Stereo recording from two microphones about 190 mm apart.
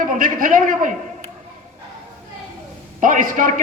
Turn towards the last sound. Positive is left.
turn(degrees=-45)  # may be behind; listen again after turning